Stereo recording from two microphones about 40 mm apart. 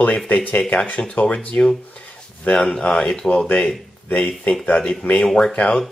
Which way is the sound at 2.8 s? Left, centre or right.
Left.